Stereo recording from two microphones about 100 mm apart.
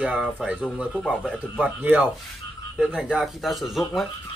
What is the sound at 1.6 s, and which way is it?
Speech, 20° right (ahead or behind).